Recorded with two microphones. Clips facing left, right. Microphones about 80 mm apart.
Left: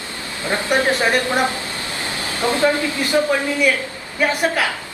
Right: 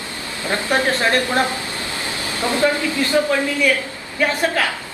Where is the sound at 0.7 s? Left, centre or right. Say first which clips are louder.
Left 1 dB; centre.